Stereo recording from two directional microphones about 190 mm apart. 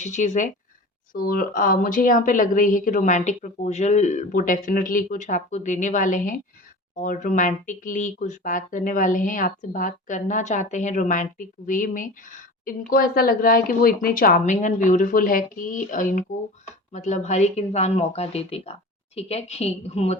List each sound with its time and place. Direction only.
0.0 s speech: 40° left (ahead or behind)